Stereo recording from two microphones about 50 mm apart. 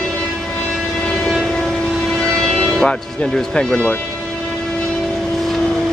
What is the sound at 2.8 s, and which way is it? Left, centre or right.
Speech, centre.